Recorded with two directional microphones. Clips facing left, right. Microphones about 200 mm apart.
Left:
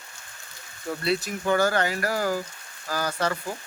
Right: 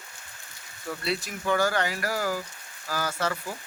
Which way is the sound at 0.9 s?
25° left (ahead or behind).